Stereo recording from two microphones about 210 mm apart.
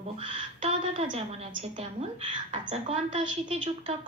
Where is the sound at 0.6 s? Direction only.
25° right (ahead or behind).